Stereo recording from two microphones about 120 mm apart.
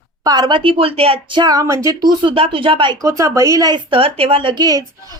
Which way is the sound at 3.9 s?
50° right (ahead or behind).